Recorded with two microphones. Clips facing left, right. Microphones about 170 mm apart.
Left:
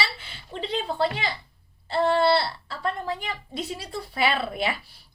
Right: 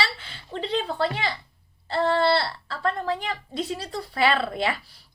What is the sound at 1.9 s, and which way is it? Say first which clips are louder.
A woman's voice: left 1 dB; 15° left (ahead or behind).